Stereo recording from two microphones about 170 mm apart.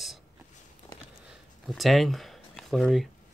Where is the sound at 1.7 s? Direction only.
Centre (ahead or behind).